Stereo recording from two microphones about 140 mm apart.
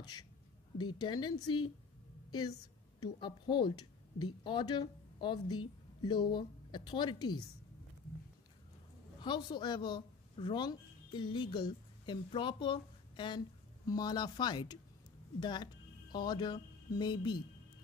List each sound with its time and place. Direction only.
0.7 s speech: 35° left (ahead or behind)
3.0 s a woman's voice: 35° left (ahead or behind)
9.2 s speech: 35° left (ahead or behind)